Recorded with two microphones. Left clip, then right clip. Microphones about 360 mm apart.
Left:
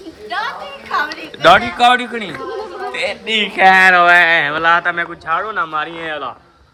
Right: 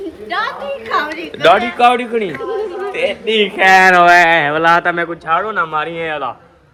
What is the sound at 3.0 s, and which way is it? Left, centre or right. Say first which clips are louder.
Speech: right 3 dB; left.